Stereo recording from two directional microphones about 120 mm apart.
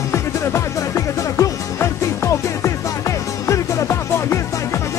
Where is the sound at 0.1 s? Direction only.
25° left (ahead or behind).